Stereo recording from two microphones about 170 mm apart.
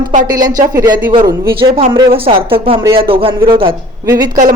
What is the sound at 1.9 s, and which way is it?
A woman's voice, 30° right (ahead or behind).